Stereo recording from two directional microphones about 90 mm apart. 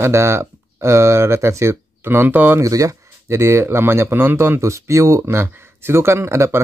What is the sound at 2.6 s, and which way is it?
Speech, 40° right (ahead or behind).